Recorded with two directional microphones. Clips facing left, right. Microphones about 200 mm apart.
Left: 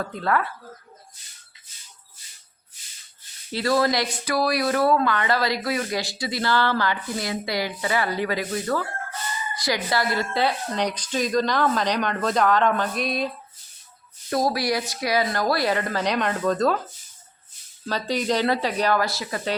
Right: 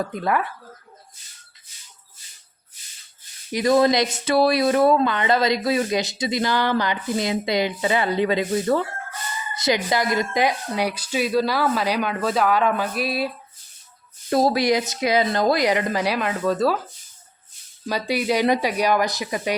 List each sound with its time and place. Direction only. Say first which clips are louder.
0.0 s speech: right 1 dB; 15° right (ahead or behind)
3.5 s speech: right 4 dB; 20° right (ahead or behind)
14.3 s speech: right 4 dB; 25° right (ahead or behind); by 16.8 s 5° right (ahead or behind)
17.8 s speech: right 2 dB; 10° right (ahead or behind)